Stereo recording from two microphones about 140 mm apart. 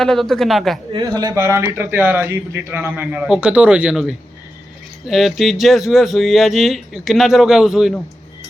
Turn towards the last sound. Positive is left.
turn(degrees=-5)  # may be behind; listen again after turning